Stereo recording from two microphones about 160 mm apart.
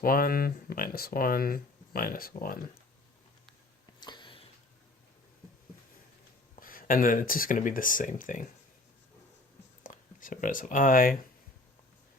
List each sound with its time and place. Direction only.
0.0 s speech: 65° left (ahead or behind)
4.0 s a sound: 30° left (ahead or behind)
6.6 s speech: 60° left (ahead or behind)
9.8 s speech: 55° left (ahead or behind)